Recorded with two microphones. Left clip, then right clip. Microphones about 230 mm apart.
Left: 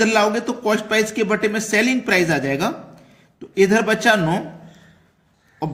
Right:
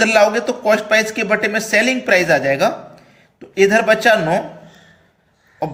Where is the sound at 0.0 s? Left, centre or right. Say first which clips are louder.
Right 4 dB; left.